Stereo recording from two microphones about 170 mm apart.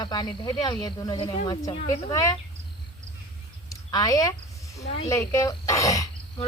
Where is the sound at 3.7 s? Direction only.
20° left (ahead or behind).